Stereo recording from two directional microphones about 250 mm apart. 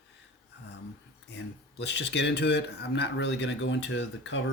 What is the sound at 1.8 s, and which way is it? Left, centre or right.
Speech, left.